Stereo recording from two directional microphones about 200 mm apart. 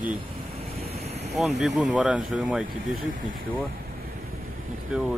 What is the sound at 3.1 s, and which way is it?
Speech, 40° right (ahead or behind).